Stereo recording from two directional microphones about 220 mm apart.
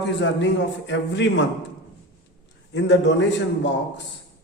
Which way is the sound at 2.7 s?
55° left (ahead or behind).